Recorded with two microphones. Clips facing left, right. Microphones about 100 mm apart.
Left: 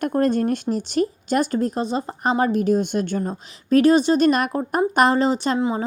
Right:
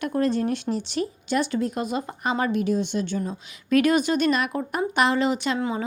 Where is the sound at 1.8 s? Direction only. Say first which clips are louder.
Left 4 dB; 30° left (ahead or behind); by 3.3 s 50° left (ahead or behind).